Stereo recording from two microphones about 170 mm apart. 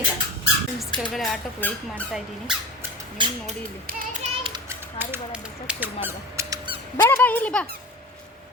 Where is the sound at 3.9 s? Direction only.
55° right (ahead or behind).